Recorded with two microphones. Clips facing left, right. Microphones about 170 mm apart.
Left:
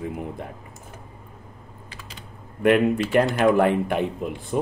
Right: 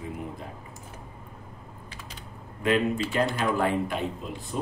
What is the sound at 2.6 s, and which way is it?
Speech, 65° left (ahead or behind).